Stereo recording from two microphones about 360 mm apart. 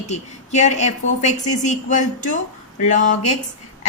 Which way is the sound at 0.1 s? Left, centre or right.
Centre.